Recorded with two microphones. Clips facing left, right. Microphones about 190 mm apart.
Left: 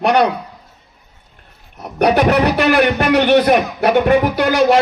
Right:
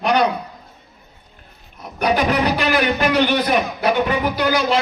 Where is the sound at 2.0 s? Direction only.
65° left (ahead or behind).